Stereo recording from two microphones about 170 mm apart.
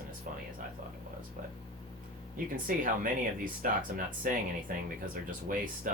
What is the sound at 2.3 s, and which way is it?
Speech, 55° right (ahead or behind).